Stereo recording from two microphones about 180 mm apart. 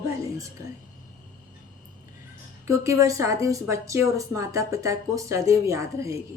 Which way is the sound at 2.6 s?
15° right (ahead or behind).